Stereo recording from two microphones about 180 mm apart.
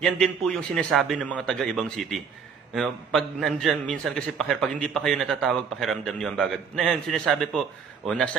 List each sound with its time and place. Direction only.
0.0 s a man's voice: 5° left (ahead or behind)